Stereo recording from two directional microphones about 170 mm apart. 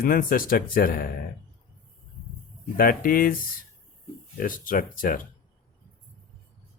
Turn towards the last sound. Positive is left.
turn(degrees=55)  # may be behind; listen again after turning